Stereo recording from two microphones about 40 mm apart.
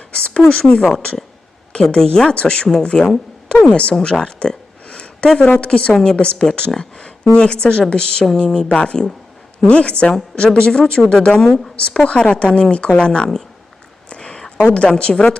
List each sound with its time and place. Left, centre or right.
0.1 s a woman's voice: left
1.7 s a woman's voice: left
5.9 s a woman's voice: centre
6.1 s a woman's voice: left
14.1 s a sound: left
14.6 s a woman's voice: left